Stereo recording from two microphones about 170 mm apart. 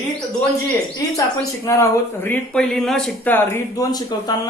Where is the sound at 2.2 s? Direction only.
10° left (ahead or behind).